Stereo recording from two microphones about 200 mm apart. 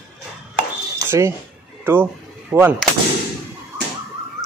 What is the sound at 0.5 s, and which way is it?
Chopping, 15° right (ahead or behind).